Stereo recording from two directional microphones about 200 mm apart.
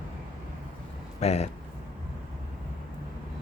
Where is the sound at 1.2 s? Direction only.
30° left (ahead or behind).